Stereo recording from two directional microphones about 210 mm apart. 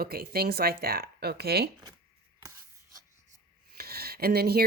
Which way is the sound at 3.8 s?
45° right (ahead or behind).